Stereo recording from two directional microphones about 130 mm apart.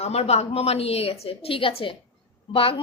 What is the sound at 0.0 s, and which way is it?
Speech, 55° left (ahead or behind).